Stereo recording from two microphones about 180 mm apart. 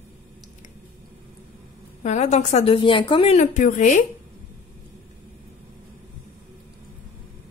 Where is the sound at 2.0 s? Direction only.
40° left (ahead or behind).